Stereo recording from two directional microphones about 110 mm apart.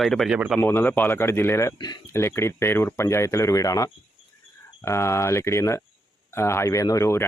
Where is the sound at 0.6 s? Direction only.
20° left (ahead or behind).